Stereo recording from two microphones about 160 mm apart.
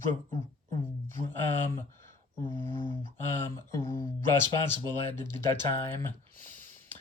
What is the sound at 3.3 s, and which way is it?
Speech, 15° left (ahead or behind).